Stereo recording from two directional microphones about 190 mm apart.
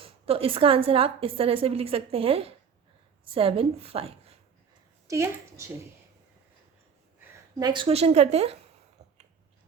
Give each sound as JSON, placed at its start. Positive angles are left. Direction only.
{"t": 0.0, "sound": "a woman's voice", "side_deg": -30}
{"t": 5.0, "sound": "a woman's voice", "side_deg": -15}
{"t": 7.6, "sound": "a woman's voice", "side_deg": -25}